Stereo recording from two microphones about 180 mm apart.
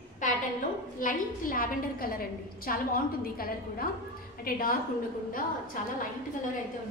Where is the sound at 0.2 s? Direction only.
45° left (ahead or behind).